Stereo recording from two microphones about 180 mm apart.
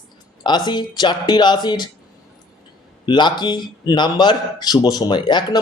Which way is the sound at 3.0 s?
25° left (ahead or behind).